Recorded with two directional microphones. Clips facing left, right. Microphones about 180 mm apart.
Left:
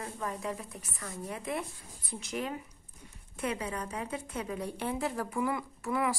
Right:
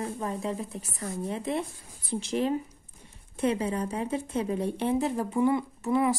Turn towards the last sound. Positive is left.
turn(degrees=-25)  # may be behind; listen again after turning